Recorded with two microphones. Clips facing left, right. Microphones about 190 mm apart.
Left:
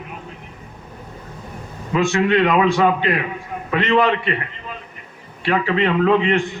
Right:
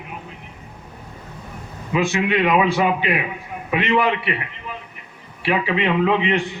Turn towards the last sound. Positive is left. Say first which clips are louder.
# left 2 dB
turn(degrees=-15)  # may be behind; listen again after turning